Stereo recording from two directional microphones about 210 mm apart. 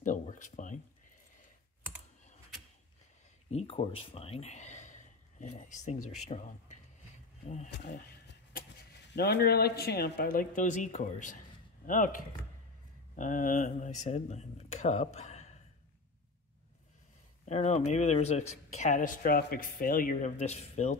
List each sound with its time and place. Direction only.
0.0 s a sound: 40° left (ahead or behind)
3.5 s speech: 30° left (ahead or behind)
9.1 s speech: 50° left (ahead or behind); by 15.5 s 35° left (ahead or behind)
17.5 s speech: 35° left (ahead or behind)